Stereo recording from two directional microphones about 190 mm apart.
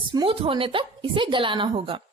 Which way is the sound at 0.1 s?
25° right (ahead or behind).